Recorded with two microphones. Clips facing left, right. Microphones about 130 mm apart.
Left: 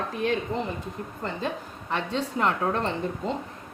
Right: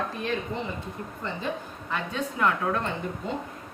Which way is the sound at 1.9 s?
30° left (ahead or behind).